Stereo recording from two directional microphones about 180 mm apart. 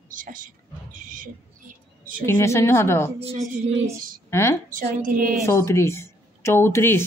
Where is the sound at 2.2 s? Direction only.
15° left (ahead or behind).